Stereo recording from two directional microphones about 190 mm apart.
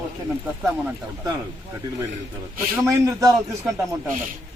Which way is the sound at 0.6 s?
15° right (ahead or behind).